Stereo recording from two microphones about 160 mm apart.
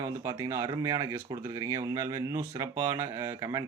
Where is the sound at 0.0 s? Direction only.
20° right (ahead or behind).